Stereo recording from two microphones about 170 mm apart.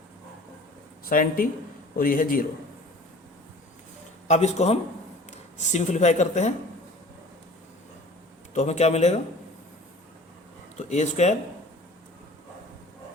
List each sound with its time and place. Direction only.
1.0 s speech: 55° left (ahead or behind)
4.3 s speech: 40° left (ahead or behind)
8.5 s speech: 40° left (ahead or behind)
10.8 s speech: 45° left (ahead or behind)